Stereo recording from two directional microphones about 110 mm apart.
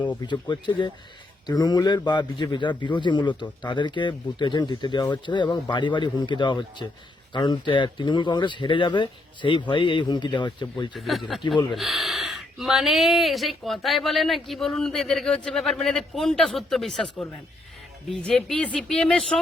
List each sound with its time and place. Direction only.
0.3 s a man's voice: 45° left (ahead or behind)
10.9 s speech: centre (ahead or behind)
11.4 s a man's voice: 50° left (ahead or behind)
11.8 s speech: centre (ahead or behind)